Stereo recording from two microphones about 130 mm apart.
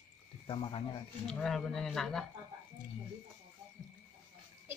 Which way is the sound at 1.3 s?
5° left (ahead or behind).